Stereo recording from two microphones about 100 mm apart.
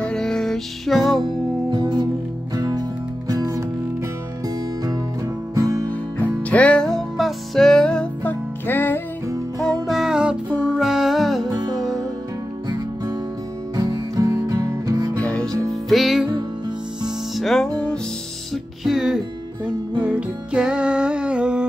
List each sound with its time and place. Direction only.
0.0 s music: 5° left (ahead or behind)
1.7 s music: 45° right (ahead or behind)
5.5 s music: 35° right (ahead or behind)
5.9 s music: 15° left (ahead or behind)
9.6 s music: centre (ahead or behind)
11.4 s music: 45° right (ahead or behind)
15.1 s music: 10° left (ahead or behind)
15.7 s music: centre (ahead or behind)
18.5 s music: 5° right (ahead or behind)